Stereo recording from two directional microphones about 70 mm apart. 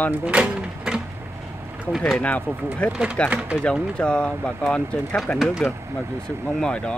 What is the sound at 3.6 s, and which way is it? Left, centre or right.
Speech, centre.